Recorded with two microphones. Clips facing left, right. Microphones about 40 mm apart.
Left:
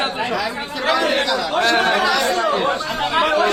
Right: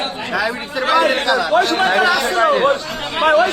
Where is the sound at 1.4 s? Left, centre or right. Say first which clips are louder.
Right 6 dB; centre.